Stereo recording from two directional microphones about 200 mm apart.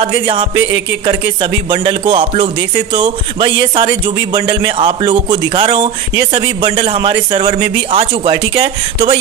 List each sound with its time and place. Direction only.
0.0 s speech: 25° right (ahead or behind)